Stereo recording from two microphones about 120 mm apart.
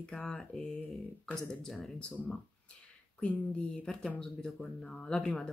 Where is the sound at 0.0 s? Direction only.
5° left (ahead or behind).